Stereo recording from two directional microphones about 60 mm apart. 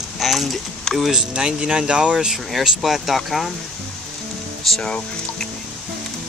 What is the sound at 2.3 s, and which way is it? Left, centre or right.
Speech, centre.